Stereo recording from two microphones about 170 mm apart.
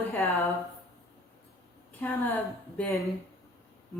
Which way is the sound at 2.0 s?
10° left (ahead or behind).